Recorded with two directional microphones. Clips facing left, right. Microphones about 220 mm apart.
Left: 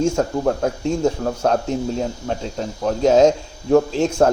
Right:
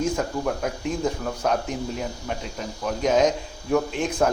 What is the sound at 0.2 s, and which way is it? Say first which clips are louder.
Speech: left 6 dB; 40° left (ahead or behind).